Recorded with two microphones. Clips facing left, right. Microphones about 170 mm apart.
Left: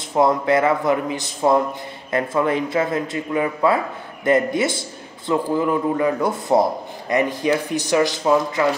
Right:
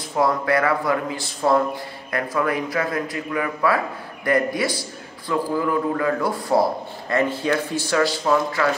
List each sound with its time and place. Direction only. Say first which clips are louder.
0.1 s a man's voice: left 3 dB; 20° left (ahead or behind)